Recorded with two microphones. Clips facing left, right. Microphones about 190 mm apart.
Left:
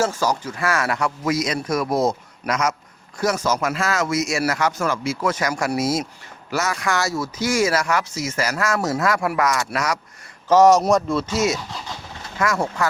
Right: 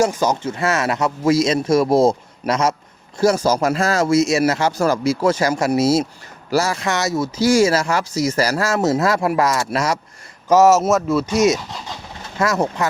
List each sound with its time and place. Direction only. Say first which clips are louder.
0.0 s speech: right 4 dB; 20° right (ahead or behind)
7.3 s speech: right 6 dB; 30° right (ahead or behind)
10.5 s speech: right 1 dB; 5° right (ahead or behind)
11.3 s speech: right 5 dB; 20° right (ahead or behind)